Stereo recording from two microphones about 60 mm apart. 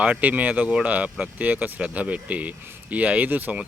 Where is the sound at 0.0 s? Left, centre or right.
Right.